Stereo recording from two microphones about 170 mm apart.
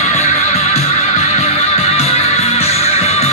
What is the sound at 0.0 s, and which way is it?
Music, 40° left (ahead or behind).